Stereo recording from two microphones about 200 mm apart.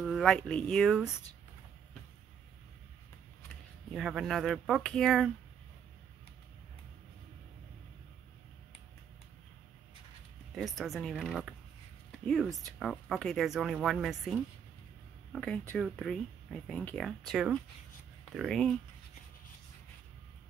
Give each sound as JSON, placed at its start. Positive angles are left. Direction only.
{"t": 0.0, "sound": "speech", "side_deg": 0}
{"t": 3.9, "sound": "speech", "side_deg": 0}
{"t": 10.5, "sound": "speech", "side_deg": 0}